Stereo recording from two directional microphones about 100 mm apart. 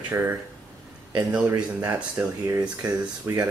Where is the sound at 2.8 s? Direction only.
35° right (ahead or behind).